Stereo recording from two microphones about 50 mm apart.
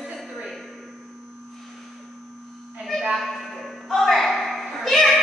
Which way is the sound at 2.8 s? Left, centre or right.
Centre.